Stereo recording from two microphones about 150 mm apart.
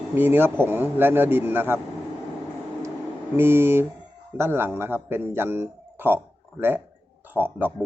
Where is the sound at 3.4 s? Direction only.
15° right (ahead or behind).